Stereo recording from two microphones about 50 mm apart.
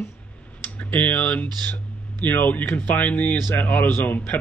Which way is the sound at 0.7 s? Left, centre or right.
Left.